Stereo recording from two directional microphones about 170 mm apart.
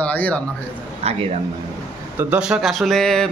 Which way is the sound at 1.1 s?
35° right (ahead or behind).